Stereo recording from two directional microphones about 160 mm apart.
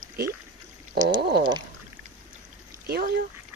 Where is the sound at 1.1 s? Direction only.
90° right.